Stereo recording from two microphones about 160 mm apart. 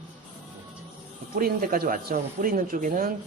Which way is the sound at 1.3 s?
60° right (ahead or behind).